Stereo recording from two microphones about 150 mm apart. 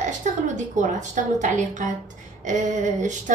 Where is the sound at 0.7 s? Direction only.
55° right (ahead or behind).